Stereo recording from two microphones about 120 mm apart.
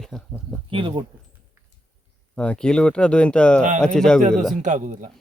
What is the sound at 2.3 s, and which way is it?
Speech, 10° left (ahead or behind).